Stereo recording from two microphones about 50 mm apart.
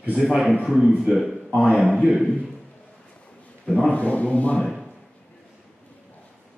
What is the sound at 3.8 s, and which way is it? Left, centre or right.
Speech, left.